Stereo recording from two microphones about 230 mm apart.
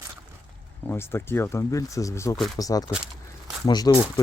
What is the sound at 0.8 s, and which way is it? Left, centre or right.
Speech, centre.